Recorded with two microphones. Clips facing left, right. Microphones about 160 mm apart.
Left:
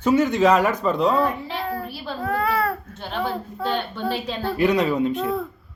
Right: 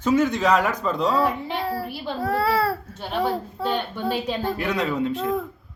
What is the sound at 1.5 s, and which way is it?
Speech, 35° right (ahead or behind).